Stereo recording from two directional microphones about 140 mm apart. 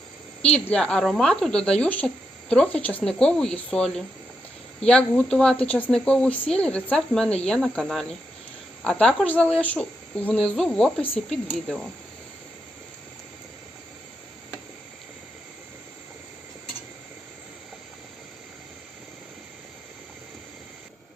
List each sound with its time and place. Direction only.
0.5 s speech: 10° left (ahead or behind)